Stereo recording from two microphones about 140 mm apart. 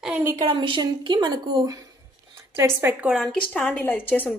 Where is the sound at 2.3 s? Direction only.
20° right (ahead or behind).